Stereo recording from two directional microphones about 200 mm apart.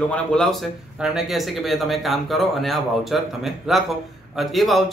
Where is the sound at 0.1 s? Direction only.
5° left (ahead or behind).